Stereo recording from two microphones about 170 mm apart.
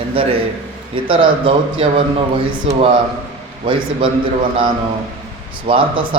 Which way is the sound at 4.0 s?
30° right (ahead or behind).